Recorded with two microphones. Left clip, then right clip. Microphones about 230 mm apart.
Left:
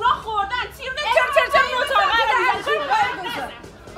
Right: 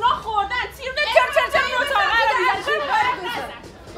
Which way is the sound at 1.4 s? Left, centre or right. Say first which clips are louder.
Left 2 dB; centre.